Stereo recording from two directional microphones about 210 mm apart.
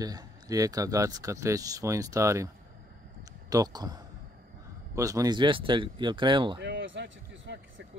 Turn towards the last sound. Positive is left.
turn(degrees=-60)  # may be behind; listen again after turning